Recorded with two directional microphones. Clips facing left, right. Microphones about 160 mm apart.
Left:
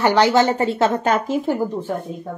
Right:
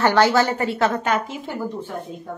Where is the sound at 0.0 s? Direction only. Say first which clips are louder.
Left 2 dB; 15° left (ahead or behind).